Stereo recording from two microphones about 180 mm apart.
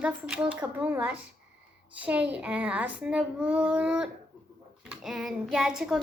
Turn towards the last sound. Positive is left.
turn(degrees=0)  # may be behind; listen again after turning